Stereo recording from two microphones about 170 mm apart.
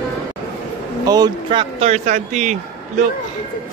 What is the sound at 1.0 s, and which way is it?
Speech, 25° right (ahead or behind).